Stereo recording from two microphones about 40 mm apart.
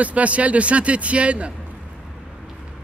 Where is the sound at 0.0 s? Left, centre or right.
Right.